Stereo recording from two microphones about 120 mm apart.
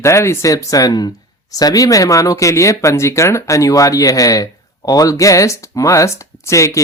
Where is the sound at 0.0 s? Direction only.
25° left (ahead or behind).